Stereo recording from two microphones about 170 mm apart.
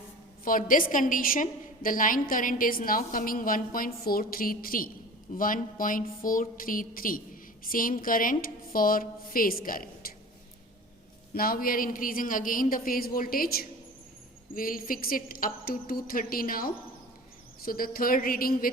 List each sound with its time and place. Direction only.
0.4 s a woman's voice: 55° left (ahead or behind)
11.3 s a woman's voice: 60° left (ahead or behind)